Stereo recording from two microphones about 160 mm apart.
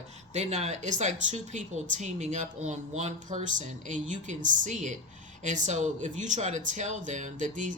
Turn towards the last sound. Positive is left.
turn(degrees=-50)  # may be behind; listen again after turning